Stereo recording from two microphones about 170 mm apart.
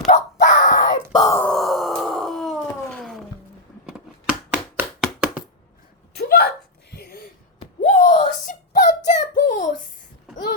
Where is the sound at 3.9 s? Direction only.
5° right (ahead or behind).